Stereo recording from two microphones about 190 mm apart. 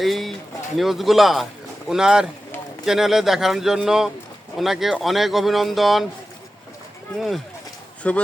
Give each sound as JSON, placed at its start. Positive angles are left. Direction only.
{"t": 0.0, "sound": "a sound", "side_deg": 0}
{"t": 0.8, "sound": "speech", "side_deg": 0}
{"t": 7.2, "sound": "speech", "side_deg": 0}